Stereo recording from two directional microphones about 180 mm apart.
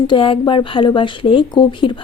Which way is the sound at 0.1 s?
30° left (ahead or behind).